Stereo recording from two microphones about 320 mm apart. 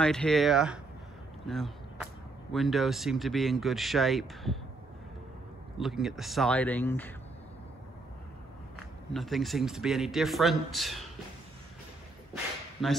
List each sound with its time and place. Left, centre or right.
0.0 s speech: centre
1.4 s a sound: centre
2.5 s speech: centre
5.8 s speech: centre
8.7 s speech: centre
12.8 s speech: centre